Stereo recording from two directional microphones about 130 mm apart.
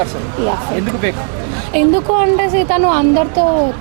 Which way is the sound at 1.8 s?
15° right (ahead or behind).